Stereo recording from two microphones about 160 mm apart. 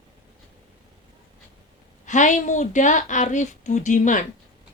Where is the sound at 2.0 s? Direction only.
50° left (ahead or behind).